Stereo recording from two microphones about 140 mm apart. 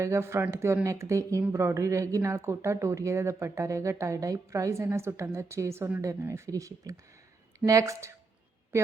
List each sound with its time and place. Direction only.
0.0 s a woman's voice: 20° right (ahead or behind)